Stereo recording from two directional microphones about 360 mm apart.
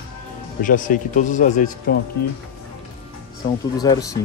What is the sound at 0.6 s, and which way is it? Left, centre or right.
A man's voice, left.